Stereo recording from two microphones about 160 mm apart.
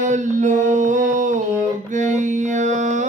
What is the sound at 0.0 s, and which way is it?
Music, 50° right (ahead or behind).